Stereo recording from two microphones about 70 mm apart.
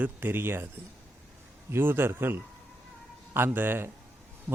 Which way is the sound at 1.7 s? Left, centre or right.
Right.